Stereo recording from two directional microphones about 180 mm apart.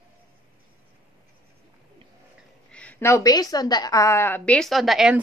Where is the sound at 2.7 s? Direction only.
10° left (ahead or behind).